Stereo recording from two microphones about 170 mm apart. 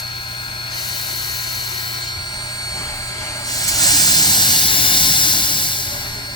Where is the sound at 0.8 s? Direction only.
25° left (ahead or behind).